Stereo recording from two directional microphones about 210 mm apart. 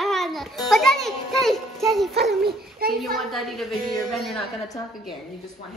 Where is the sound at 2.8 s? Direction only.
45° right (ahead or behind).